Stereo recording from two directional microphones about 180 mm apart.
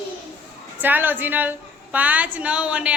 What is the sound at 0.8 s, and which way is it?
A woman's voice, 10° right (ahead or behind).